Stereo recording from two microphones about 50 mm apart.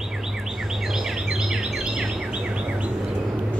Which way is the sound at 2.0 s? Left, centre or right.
Right.